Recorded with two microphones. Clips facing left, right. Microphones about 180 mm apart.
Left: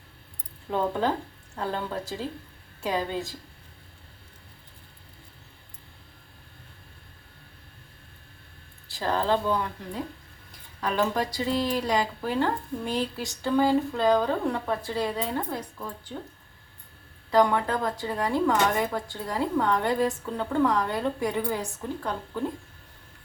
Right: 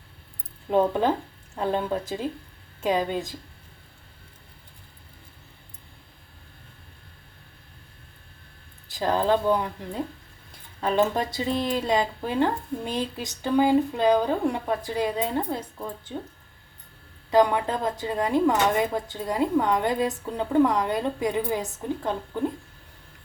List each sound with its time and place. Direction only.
0.7 s speech: 15° right (ahead or behind)
8.9 s speech: 15° right (ahead or behind)
10.8 s speech: 25° right (ahead or behind)
17.3 s speech: 15° right (ahead or behind)